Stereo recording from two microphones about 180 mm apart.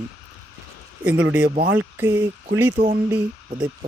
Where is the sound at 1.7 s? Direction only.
10° right (ahead or behind).